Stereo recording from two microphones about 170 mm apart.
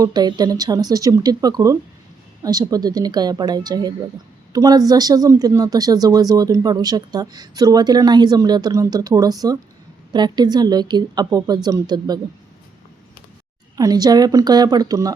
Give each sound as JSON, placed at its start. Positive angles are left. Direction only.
{"t": 0.0, "sound": "speech", "side_deg": -25}
{"t": 13.7, "sound": "speech", "side_deg": -20}